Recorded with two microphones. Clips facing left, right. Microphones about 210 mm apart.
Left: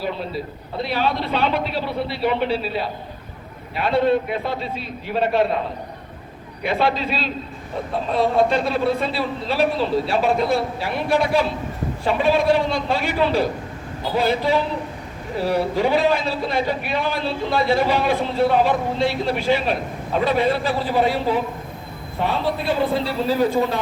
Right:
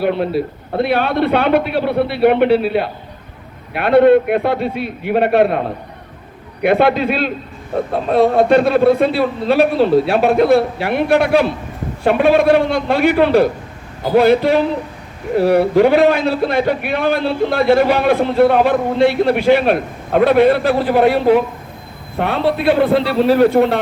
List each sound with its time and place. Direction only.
0.0 s a man's voice: 65° right (ahead or behind)